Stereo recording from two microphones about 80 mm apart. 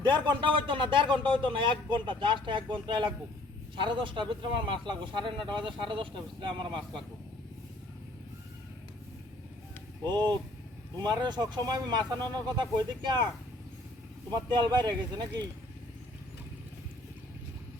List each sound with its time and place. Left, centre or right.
0.0 s speech: right
10.0 s speech: right
14.3 s speech: right